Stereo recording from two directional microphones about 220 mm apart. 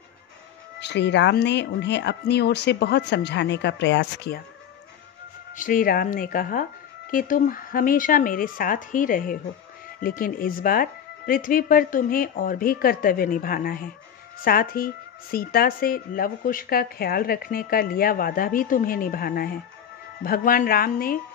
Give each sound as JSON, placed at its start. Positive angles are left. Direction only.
{"t": 0.7, "sound": "speech", "side_deg": 50}
{"t": 5.6, "sound": "speech", "side_deg": 40}